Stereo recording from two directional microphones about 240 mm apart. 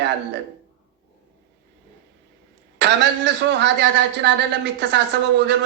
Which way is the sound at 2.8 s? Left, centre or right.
Right.